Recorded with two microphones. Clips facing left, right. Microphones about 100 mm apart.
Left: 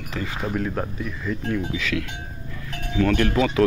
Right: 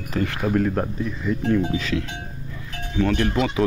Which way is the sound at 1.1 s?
25° right (ahead or behind).